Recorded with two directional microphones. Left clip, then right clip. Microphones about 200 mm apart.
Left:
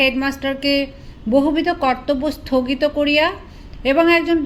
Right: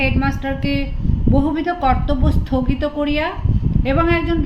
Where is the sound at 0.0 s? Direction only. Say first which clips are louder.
Left 2 dB; 30° left (ahead or behind).